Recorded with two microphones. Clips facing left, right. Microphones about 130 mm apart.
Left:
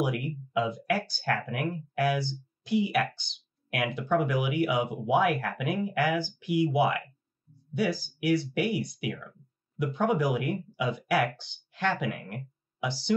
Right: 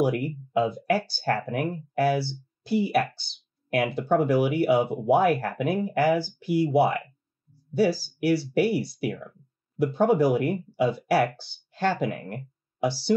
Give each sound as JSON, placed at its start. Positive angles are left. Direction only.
{"t": 0.5, "sound": "speech", "side_deg": -35}